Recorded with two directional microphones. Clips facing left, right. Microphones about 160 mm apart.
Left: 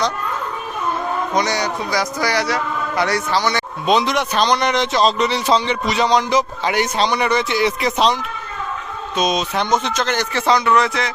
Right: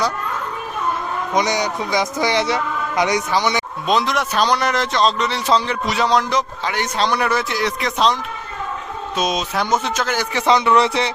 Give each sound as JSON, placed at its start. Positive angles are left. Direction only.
{"t": 1.3, "sound": "a man's voice", "side_deg": -15}
{"t": 3.8, "sound": "a man's voice", "side_deg": 0}
{"t": 9.1, "sound": "a man's voice", "side_deg": -5}